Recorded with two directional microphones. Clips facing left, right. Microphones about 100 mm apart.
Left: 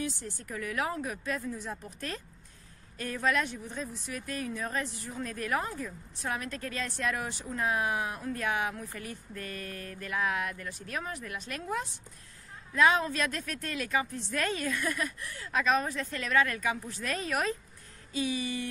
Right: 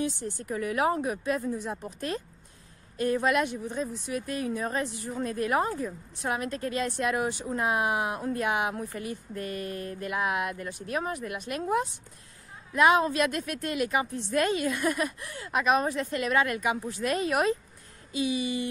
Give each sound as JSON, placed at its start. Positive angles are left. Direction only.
{"t": 0.0, "sound": "a woman's voice", "side_deg": -20}
{"t": 8.2, "sound": "speech", "side_deg": -30}
{"t": 8.5, "sound": "a woman's voice", "side_deg": -15}
{"t": 12.7, "sound": "a woman's voice", "side_deg": -15}